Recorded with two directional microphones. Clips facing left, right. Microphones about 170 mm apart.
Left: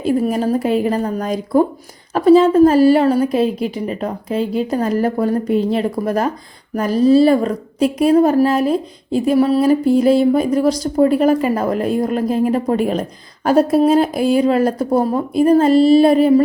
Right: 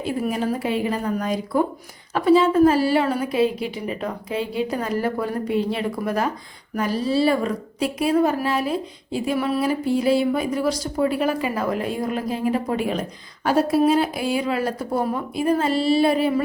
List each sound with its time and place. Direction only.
0.0 s a woman's voice: 45° left (ahead or behind)